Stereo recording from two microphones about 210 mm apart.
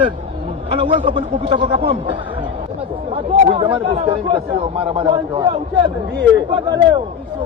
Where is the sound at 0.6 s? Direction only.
25° right (ahead or behind).